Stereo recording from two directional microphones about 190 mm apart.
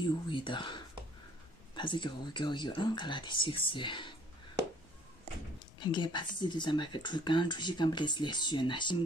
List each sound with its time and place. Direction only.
0.0 s speech: 25° left (ahead or behind)
5.8 s speech: 25° left (ahead or behind)